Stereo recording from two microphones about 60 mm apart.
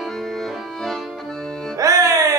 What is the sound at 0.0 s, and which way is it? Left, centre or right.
Accordion, centre.